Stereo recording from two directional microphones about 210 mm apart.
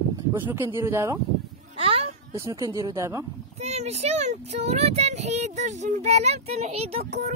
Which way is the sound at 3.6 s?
30° right (ahead or behind).